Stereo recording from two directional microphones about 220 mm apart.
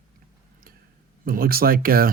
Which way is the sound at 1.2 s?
40° right (ahead or behind).